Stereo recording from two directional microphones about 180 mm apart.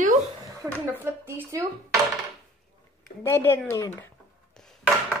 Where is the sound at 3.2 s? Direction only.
15° left (ahead or behind).